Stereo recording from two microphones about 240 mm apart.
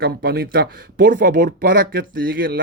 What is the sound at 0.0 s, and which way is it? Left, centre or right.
Speech, right.